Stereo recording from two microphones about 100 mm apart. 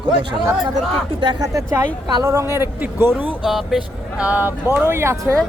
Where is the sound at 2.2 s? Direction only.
25° right (ahead or behind).